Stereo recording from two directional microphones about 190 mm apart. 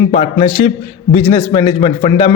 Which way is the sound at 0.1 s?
30° left (ahead or behind).